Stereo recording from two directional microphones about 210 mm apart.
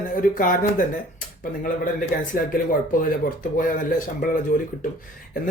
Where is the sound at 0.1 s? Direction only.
40° left (ahead or behind).